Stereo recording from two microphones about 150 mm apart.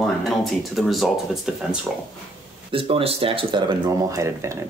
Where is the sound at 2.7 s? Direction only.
35° right (ahead or behind); by 4.5 s 20° right (ahead or behind).